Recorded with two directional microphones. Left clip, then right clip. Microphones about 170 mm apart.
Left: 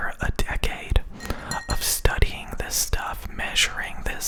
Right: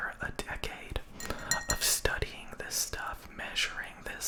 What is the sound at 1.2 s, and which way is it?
Whispering, 40° left (ahead or behind).